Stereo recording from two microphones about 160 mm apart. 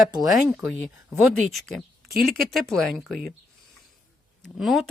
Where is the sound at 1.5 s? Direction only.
Centre (ahead or behind).